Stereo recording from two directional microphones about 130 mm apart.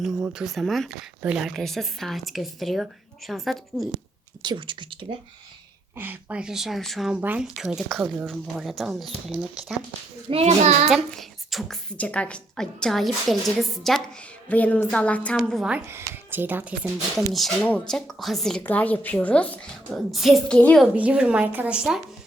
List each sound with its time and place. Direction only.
0.0 s a woman's voice: 5° right (ahead or behind)
4.4 s speech: 40° right (ahead or behind)
6.0 s a woman's voice: 15° right (ahead or behind)
7.2 s speech: 15° right (ahead or behind)
7.4 s a woman's voice: 5° right (ahead or behind)
10.2 s a child's voice: 55° right (ahead or behind)
10.8 s a woman's voice: centre (ahead or behind)
14.4 s a woman's voice: 10° left (ahead or behind)
15.4 s a woman's voice: centre (ahead or behind)
15.7 s speech: 15° right (ahead or behind)
17.3 s a woman's voice: centre (ahead or behind)
20.6 s a woman's voice: 10° left (ahead or behind)
20.8 s speech: 10° right (ahead or behind)